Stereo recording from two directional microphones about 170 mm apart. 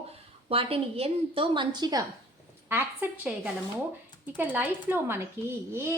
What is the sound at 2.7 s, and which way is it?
A woman's voice, 10° right (ahead or behind).